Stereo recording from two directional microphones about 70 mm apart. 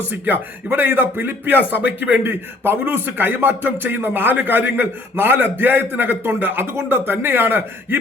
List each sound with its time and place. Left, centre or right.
0.1 s a man's voice: right